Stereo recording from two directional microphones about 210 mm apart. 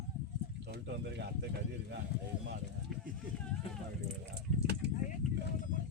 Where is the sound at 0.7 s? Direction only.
50° right (ahead or behind).